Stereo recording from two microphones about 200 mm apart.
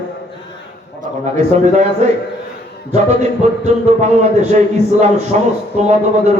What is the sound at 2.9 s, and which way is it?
A man's voice, 35° right (ahead or behind).